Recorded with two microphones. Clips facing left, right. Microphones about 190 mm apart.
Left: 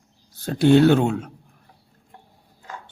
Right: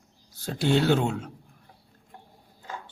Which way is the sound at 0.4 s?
55° left (ahead or behind).